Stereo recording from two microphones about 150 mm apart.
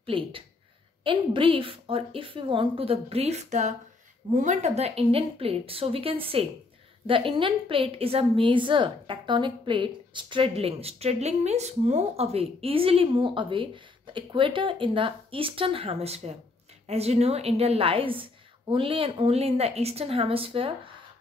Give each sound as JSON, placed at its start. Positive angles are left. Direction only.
{"t": 0.0, "sound": "a woman's voice", "side_deg": -35}